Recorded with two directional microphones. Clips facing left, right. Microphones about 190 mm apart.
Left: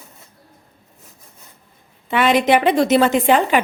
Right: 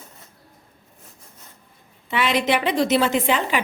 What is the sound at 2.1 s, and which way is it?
A woman's voice, 50° left (ahead or behind).